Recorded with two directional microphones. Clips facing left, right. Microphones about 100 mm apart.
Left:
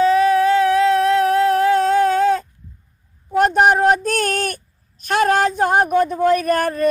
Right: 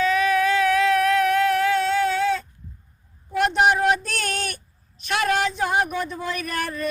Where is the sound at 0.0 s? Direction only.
35° left (ahead or behind).